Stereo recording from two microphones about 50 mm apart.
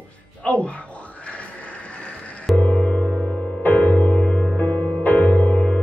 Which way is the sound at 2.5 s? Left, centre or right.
Left.